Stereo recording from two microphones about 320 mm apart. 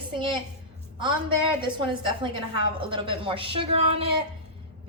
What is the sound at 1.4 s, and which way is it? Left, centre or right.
A woman's voice, centre.